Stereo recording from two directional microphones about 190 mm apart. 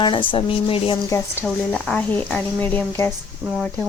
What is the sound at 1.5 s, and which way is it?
A woman's voice, 5° left (ahead or behind).